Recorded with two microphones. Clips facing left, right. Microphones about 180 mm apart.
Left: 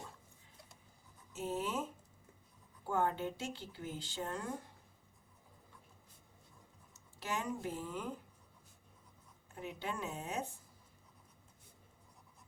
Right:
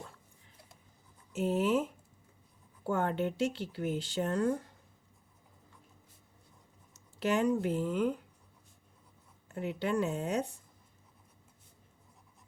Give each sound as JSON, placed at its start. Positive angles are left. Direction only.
{"t": 1.4, "sound": "speech", "side_deg": -70}
{"t": 2.9, "sound": "speech", "side_deg": -70}
{"t": 7.2, "sound": "speech", "side_deg": -70}
{"t": 9.6, "sound": "speech", "side_deg": -75}